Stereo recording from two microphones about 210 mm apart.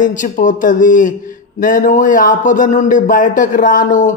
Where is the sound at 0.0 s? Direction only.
35° left (ahead or behind).